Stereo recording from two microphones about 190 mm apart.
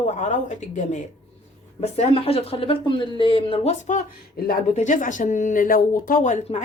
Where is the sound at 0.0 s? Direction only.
40° left (ahead or behind).